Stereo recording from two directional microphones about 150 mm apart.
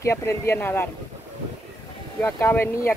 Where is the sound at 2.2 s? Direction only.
15° left (ahead or behind).